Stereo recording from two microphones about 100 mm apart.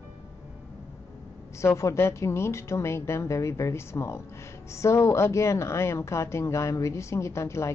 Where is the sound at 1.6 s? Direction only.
30° left (ahead or behind).